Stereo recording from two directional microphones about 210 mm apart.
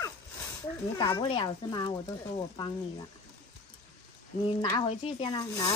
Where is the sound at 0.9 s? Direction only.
25° left (ahead or behind).